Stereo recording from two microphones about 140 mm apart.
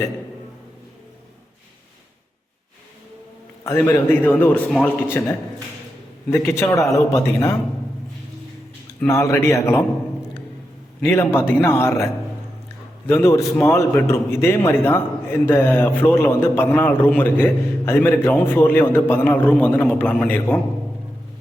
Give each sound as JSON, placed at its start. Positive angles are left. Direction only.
{"t": 3.6, "sound": "a man's voice", "side_deg": 15}
{"t": 9.0, "sound": "speech", "side_deg": 20}
{"t": 11.0, "sound": "a man's voice", "side_deg": 15}
{"t": 13.1, "sound": "a man's voice", "side_deg": 15}